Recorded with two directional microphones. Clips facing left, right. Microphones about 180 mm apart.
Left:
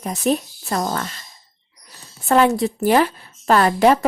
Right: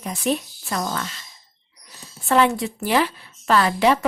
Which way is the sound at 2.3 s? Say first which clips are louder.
Left 3 dB; 40° left (ahead or behind).